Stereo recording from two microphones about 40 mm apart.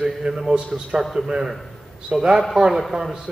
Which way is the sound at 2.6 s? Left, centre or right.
Centre.